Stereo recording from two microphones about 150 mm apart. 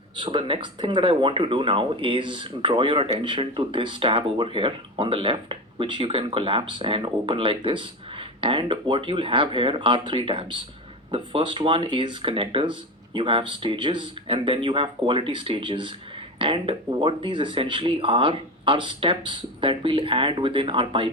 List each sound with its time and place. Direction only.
0.2 s speech: 35° right (ahead or behind)